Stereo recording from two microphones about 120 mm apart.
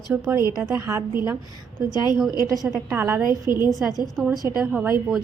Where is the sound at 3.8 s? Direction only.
Centre (ahead or behind).